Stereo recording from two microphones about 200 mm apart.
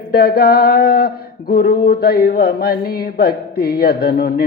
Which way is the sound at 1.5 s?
50° left (ahead or behind).